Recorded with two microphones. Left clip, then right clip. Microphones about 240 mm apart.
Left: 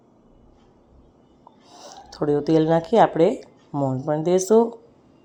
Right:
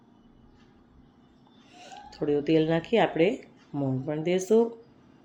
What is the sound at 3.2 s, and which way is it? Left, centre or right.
Speech, centre.